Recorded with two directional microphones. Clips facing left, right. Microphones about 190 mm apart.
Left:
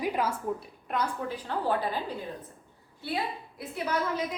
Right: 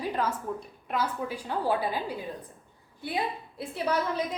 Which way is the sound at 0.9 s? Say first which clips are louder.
Right 1 dB; 10° right (ahead or behind).